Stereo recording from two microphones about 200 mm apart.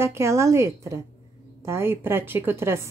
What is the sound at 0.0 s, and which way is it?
Speech, 15° right (ahead or behind).